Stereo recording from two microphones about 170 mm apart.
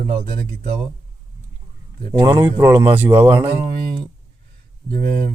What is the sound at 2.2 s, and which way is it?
Speech, 15° right (ahead or behind).